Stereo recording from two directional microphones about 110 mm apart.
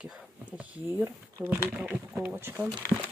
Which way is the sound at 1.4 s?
15° right (ahead or behind).